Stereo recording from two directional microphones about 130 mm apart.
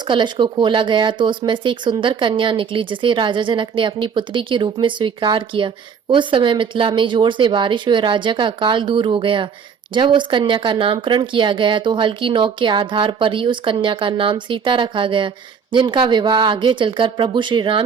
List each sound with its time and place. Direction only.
0.1 s speech: 40° right (ahead or behind)